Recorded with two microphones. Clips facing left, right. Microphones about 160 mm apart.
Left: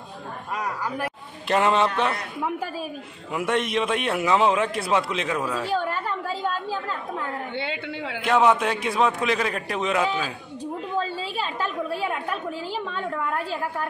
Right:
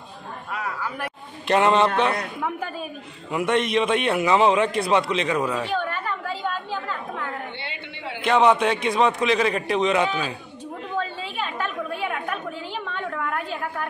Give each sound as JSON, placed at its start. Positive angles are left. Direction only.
{"t": 0.5, "sound": "speech", "side_deg": 40}
{"t": 1.5, "sound": "a man's voice", "side_deg": 0}
{"t": 3.3, "sound": "a man's voice", "side_deg": 0}
{"t": 5.7, "sound": "a sound", "side_deg": 35}
{"t": 8.2, "sound": "a man's voice", "side_deg": 5}
{"t": 11.0, "sound": "chatter", "side_deg": 35}